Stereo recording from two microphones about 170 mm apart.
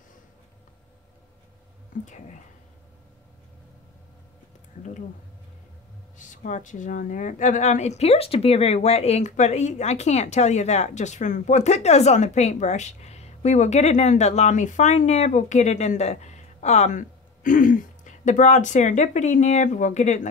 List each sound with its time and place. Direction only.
2.0 s a woman's voice: 45° left (ahead or behind)
6.1 s a woman's voice: 50° left (ahead or behind)